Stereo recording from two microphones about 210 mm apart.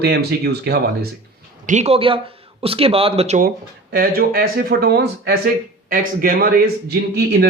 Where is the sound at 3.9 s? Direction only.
45° right (ahead or behind).